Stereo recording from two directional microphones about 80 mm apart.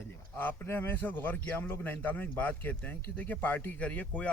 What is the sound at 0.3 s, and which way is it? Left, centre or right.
A man's voice, left.